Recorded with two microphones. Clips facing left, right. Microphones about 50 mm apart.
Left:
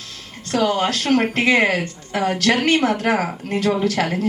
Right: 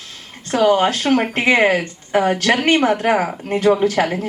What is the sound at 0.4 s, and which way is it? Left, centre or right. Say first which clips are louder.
A woman's voice: right 4 dB; right.